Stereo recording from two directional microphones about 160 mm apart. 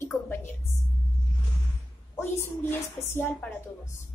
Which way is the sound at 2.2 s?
15° left (ahead or behind).